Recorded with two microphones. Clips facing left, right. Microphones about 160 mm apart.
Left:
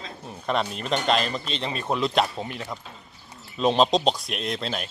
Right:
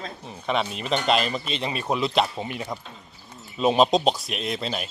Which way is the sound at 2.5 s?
15° right (ahead or behind).